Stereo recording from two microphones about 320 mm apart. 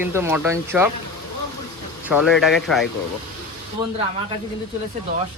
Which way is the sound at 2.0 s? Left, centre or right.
Centre.